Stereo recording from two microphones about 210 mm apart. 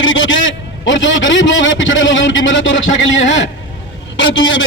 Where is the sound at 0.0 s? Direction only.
65° left (ahead or behind).